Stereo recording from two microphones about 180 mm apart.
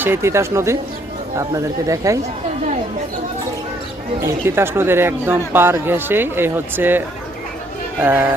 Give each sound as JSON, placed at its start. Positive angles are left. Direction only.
{"t": 0.0, "sound": "speech", "side_deg": -15}
{"t": 4.2, "sound": "speech", "side_deg": -15}
{"t": 8.0, "sound": "speech", "side_deg": -10}